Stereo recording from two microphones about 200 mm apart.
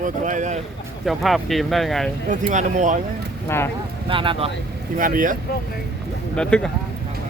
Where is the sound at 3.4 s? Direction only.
10° left (ahead or behind).